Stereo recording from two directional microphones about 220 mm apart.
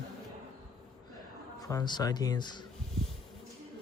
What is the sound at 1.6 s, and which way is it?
Speech, 15° left (ahead or behind).